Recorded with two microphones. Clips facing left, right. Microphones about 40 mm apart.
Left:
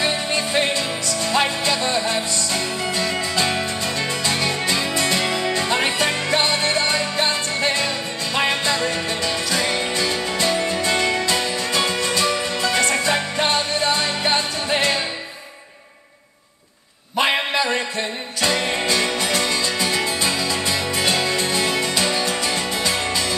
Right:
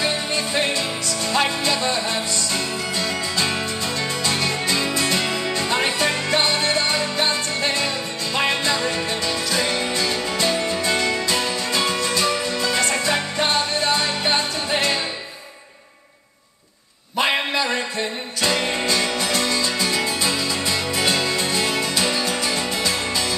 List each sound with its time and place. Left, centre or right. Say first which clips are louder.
0.0 s music: left 1 dB; centre
17.2 s a sound: left 1 dB; centre
18.4 s music: left 1 dB; centre